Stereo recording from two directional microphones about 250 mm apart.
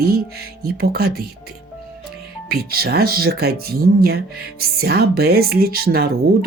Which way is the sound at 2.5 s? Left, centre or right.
Right.